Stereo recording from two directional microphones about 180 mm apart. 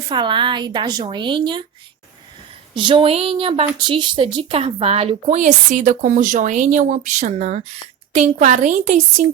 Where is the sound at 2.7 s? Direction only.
30° right (ahead or behind).